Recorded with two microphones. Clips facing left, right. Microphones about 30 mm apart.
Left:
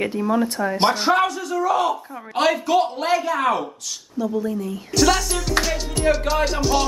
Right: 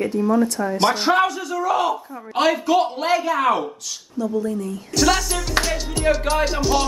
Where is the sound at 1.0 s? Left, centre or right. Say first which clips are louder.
Right 1 dB; centre.